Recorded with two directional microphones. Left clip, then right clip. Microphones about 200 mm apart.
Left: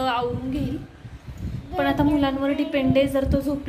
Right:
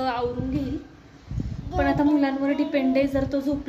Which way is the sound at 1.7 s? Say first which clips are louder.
Even; 5° right (ahead or behind).